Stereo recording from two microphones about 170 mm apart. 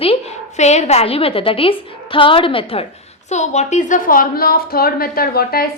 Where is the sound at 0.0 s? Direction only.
35° left (ahead or behind).